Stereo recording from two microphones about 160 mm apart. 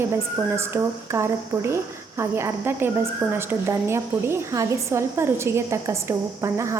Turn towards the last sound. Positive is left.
turn(degrees=-20)  # may be behind; listen again after turning